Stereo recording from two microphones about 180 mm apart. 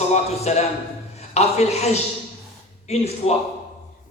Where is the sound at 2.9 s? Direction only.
35° left (ahead or behind).